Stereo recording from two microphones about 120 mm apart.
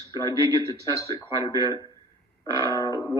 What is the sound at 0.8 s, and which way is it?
Speech, 30° left (ahead or behind).